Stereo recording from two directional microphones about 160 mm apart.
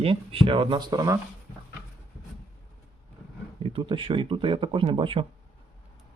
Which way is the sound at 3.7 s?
35° right (ahead or behind).